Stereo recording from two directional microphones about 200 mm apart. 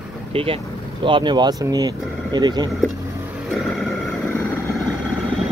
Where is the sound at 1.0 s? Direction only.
25° right (ahead or behind).